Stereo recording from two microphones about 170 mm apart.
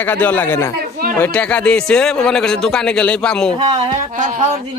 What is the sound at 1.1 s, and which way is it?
Speech, 10° left (ahead or behind).